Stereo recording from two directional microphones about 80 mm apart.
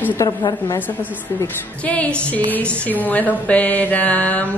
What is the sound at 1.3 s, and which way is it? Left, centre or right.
Speech, left.